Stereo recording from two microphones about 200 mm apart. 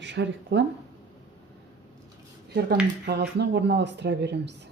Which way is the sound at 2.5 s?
50° right (ahead or behind).